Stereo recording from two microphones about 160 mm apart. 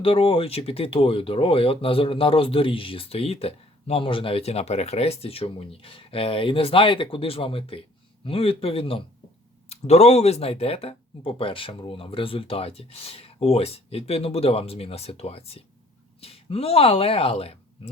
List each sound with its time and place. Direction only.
0.0 s speech: 35° left (ahead or behind)